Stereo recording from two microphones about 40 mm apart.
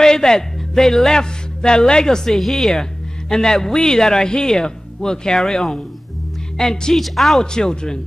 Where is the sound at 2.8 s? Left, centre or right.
Centre.